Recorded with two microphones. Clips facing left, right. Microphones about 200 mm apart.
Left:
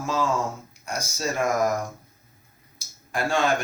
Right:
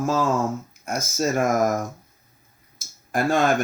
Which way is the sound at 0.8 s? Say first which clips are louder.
Right 5 dB; 50° right (ahead or behind).